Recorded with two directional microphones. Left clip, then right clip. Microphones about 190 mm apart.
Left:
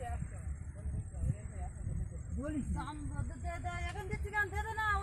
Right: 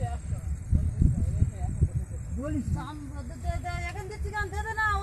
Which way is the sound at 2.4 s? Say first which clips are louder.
Right 6 dB; 10° right (ahead or behind).